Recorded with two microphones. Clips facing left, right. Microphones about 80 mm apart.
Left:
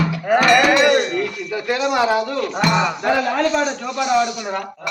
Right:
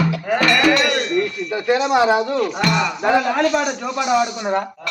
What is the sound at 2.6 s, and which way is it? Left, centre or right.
Speech, centre.